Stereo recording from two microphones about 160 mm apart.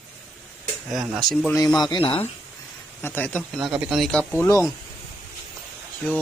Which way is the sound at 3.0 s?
15° left (ahead or behind).